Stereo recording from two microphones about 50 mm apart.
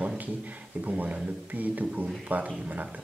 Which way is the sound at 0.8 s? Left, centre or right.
Right.